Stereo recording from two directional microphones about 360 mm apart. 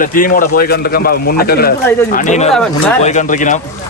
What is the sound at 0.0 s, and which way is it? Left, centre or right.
A man's voice, left.